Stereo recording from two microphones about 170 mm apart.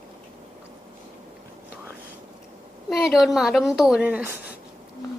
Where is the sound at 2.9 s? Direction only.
Centre (ahead or behind).